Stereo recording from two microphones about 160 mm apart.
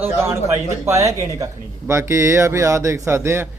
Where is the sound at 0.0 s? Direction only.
15° right (ahead or behind).